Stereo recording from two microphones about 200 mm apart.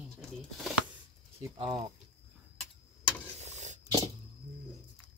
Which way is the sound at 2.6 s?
5° left (ahead or behind).